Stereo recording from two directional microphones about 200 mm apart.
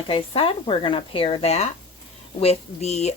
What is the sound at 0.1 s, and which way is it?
Speech, 25° left (ahead or behind).